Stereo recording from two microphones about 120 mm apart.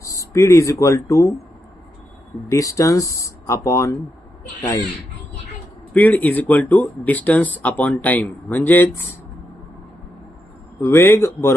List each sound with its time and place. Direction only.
0.0 s speech: 25° left (ahead or behind)
2.5 s speech: 25° left (ahead or behind)
5.9 s speech: 15° left (ahead or behind)
10.8 s speech: 20° left (ahead or behind)